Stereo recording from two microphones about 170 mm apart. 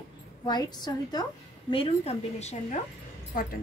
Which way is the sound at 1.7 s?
35° left (ahead or behind).